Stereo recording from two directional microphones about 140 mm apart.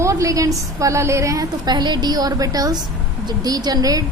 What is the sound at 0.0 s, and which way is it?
A woman's voice, 20° right (ahead or behind).